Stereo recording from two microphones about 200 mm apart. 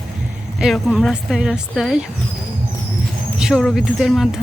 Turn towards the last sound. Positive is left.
turn(degrees=0)  # may be behind; listen again after turning